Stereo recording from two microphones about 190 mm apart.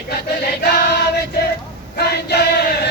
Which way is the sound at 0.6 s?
55° left (ahead or behind).